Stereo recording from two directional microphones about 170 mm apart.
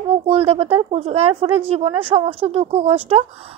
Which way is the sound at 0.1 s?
35° right (ahead or behind).